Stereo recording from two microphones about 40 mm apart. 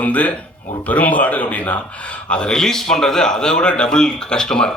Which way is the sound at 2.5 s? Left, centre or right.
Centre.